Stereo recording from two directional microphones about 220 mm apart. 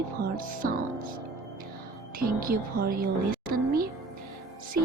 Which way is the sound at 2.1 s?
40° right (ahead or behind).